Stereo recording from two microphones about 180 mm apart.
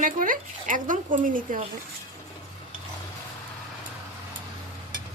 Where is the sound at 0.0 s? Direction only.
50° right (ahead or behind).